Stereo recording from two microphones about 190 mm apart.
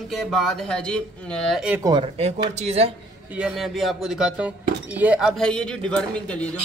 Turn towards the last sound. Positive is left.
turn(degrees=5)  # may be behind; listen again after turning